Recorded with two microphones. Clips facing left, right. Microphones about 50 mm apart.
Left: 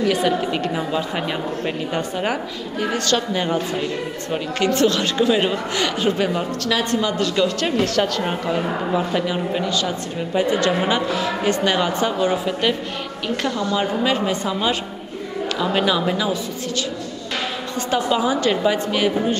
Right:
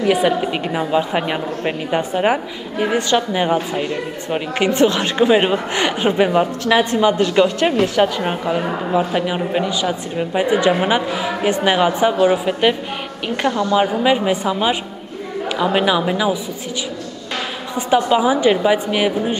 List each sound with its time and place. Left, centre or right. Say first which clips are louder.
0.0 s a woman's voice: right 3 dB; centre
17.7 s a woman's voice: right 5 dB; centre